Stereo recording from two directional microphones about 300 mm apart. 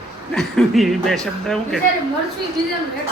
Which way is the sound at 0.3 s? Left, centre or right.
Centre.